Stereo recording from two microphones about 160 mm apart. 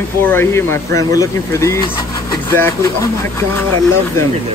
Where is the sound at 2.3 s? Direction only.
15° left (ahead or behind).